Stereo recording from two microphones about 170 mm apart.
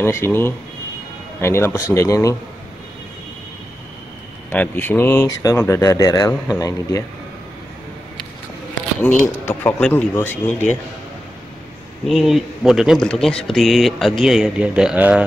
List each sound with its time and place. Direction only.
0.0 s speech: 15° left (ahead or behind)
4.5 s speech: 10° left (ahead or behind)
9.0 s speech: 10° left (ahead or behind)
12.1 s speech: centre (ahead or behind)